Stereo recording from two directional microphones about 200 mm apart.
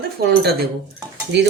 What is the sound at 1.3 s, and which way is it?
Speech, 60° right (ahead or behind).